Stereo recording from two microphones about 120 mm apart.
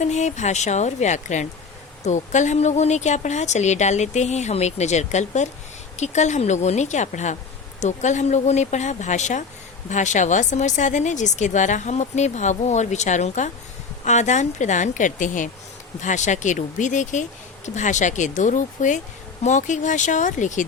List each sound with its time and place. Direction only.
0.0 s a woman's voice: 75° left (ahead or behind)